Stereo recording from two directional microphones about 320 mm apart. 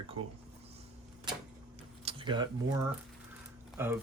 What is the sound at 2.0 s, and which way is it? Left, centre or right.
Speech, centre.